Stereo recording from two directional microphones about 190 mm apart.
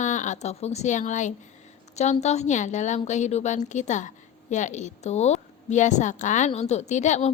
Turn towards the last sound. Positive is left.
turn(degrees=40)  # may be behind; listen again after turning